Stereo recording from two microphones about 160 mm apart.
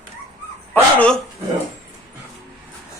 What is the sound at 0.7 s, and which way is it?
Dog, 5° left (ahead or behind).